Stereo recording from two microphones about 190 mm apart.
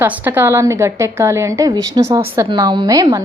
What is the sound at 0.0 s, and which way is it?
A woman's voice, 10° right (ahead or behind).